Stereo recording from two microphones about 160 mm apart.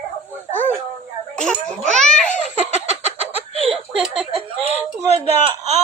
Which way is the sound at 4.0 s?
5° right (ahead or behind).